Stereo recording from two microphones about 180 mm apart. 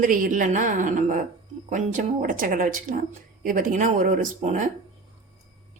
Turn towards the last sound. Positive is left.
turn(degrees=-45)  # may be behind; listen again after turning